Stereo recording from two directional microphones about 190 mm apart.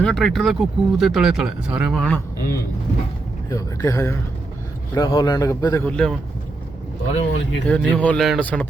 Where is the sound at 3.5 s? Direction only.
15° left (ahead or behind).